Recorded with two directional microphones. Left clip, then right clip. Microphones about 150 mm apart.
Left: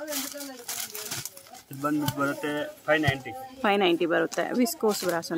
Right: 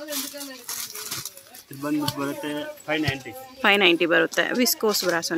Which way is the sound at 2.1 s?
20° left (ahead or behind).